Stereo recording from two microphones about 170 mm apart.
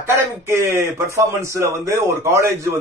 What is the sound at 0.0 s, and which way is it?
Speech, 15° right (ahead or behind).